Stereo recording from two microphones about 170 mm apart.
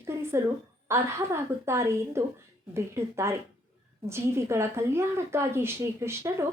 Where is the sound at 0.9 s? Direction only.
15° right (ahead or behind).